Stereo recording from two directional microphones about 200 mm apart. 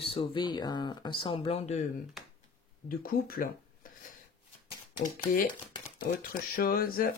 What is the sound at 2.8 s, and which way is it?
Speech, 45° left (ahead or behind).